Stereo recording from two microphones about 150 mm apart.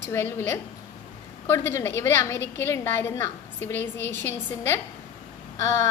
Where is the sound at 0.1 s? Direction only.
15° left (ahead or behind).